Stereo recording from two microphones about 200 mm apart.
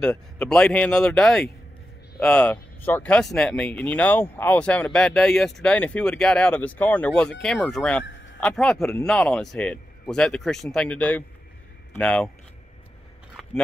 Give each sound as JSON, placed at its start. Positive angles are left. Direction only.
{"t": 0.0, "sound": "speech", "side_deg": 5}
{"t": 8.0, "sound": "a sound", "side_deg": 65}
{"t": 8.4, "sound": "speech", "side_deg": 5}
{"t": 13.4, "sound": "biting", "side_deg": 0}